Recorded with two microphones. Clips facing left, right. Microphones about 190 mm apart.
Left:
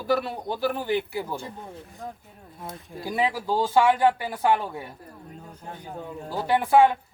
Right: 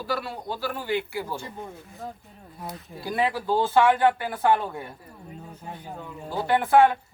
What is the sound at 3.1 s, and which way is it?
Speech, 10° left (ahead or behind).